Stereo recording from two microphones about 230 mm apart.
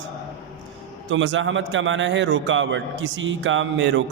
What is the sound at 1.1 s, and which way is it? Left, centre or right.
A man's voice, right.